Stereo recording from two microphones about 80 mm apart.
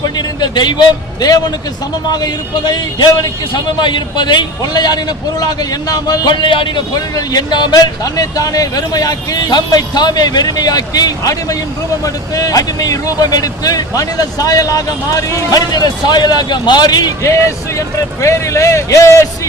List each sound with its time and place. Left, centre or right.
0.2 s a man's voice: left
7.2 s speech: left
17.2 s speech: left